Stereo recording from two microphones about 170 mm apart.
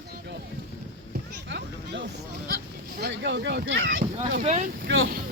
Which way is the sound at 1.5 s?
85° right.